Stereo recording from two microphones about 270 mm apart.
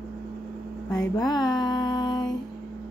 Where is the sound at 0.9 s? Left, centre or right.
Centre.